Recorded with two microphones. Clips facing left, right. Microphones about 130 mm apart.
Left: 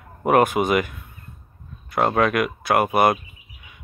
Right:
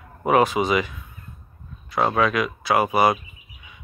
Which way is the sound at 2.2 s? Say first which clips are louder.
Left 1 dB; 55° left (ahead or behind).